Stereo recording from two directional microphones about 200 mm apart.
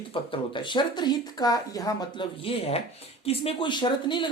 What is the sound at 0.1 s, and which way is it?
Speech, 25° left (ahead or behind).